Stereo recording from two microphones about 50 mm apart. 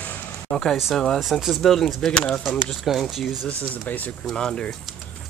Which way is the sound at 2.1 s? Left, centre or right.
Centre.